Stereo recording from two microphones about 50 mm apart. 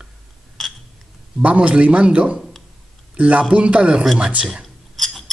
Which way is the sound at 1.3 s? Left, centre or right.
Right.